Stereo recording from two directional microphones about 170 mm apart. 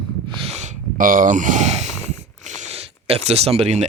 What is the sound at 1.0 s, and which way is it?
Speech, 55° right (ahead or behind).